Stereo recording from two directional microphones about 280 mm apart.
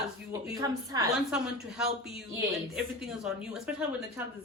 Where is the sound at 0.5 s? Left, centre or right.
Centre.